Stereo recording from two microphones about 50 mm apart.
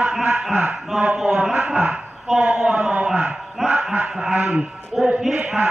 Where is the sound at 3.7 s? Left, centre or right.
Centre.